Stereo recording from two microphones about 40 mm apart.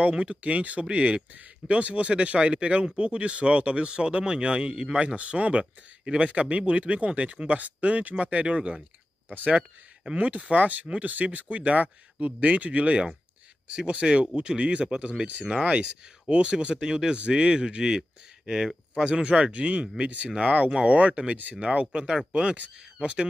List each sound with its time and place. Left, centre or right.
0.2 s speech: right
9.3 s speech: right
13.7 s speech: right
21.9 s speech: centre